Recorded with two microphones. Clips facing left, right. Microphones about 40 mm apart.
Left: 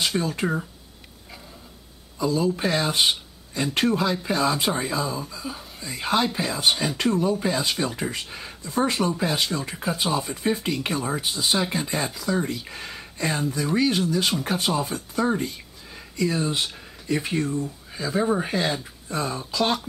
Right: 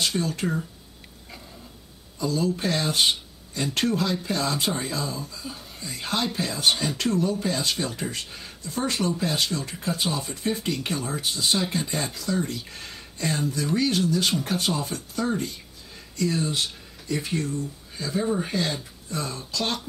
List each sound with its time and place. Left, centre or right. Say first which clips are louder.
0.0 s speech: left 2 dB; centre
2.1 s speech: left 2 dB; centre